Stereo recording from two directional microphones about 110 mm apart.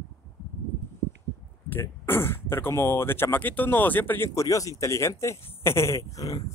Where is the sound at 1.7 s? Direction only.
20° left (ahead or behind).